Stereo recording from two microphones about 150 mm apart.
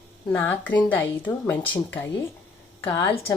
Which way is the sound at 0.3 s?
10° left (ahead or behind).